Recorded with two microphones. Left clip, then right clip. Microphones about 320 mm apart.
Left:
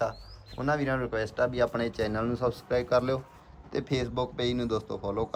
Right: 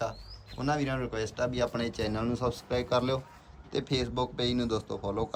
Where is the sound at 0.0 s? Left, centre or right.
Centre.